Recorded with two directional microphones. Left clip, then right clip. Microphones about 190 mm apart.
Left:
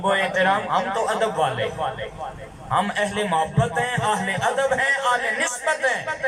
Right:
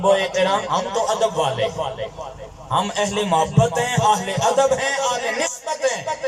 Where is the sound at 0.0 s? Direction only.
25° right (ahead or behind).